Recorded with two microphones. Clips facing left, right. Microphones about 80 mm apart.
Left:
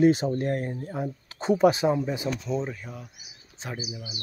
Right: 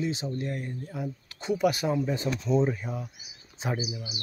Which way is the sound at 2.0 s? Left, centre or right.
Centre.